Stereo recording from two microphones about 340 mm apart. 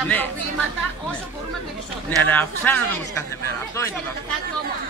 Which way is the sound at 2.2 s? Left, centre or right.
Centre.